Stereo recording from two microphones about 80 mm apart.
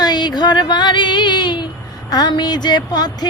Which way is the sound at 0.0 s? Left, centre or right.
Left.